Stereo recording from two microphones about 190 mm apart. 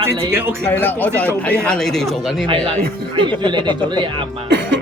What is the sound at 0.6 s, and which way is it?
Speech, 10° left (ahead or behind).